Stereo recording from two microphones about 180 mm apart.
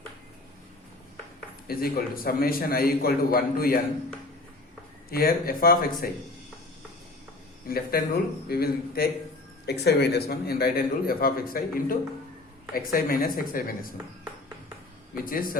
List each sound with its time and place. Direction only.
1.6 s a man's voice: 55° left (ahead or behind)
5.1 s a man's voice: 55° left (ahead or behind)
7.7 s a man's voice: 55° left (ahead or behind)
15.1 s speech: 50° left (ahead or behind)